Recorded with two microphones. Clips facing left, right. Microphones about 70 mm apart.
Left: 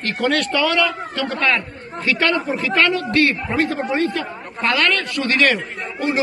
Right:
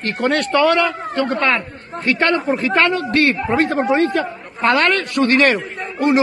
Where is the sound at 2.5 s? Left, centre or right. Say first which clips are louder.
Right 2 dB; right.